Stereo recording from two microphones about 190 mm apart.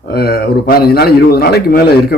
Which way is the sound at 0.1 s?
55° left (ahead or behind).